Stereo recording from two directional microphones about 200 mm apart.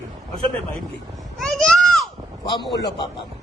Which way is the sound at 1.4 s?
Centre (ahead or behind).